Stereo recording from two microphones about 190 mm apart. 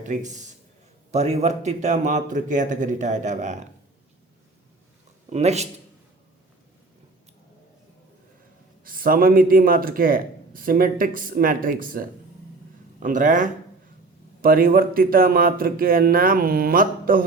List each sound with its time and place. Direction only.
0.0 s a man's voice: 40° right (ahead or behind)
5.3 s speech: 35° right (ahead or behind)
8.8 s a man's voice: 50° right (ahead or behind)